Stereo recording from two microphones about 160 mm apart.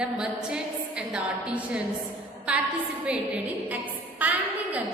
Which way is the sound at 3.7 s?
10° right (ahead or behind).